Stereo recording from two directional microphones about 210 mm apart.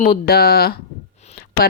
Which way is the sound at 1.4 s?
45° left (ahead or behind).